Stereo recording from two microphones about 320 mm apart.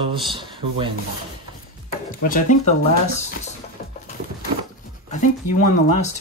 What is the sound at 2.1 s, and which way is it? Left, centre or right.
Speech, left.